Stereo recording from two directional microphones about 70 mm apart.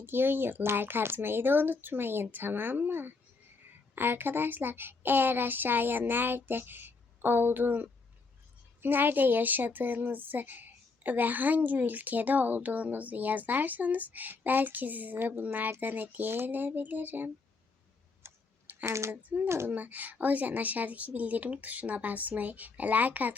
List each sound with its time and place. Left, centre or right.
0.0 s speech: right
18.2 s a sound: right
18.7 s speech: right
19.1 s speech: right